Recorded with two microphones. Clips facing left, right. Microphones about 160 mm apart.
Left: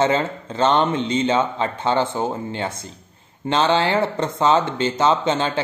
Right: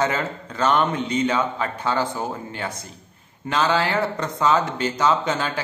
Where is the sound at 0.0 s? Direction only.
25° left (ahead or behind).